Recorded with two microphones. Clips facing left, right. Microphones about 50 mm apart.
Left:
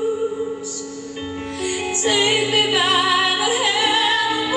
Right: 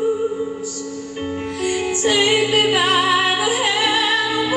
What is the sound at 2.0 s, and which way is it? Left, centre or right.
Music, right.